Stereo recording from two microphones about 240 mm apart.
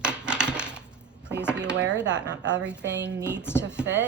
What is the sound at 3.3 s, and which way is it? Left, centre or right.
Speech, centre.